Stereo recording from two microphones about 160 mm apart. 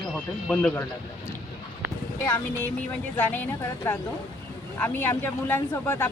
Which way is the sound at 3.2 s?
10° left (ahead or behind).